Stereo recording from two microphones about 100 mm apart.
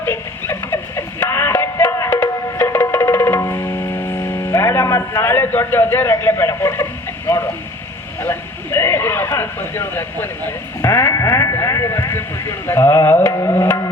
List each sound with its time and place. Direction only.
0.0 s music: 20° left (ahead or behind)
8.2 s speech: 25° left (ahead or behind)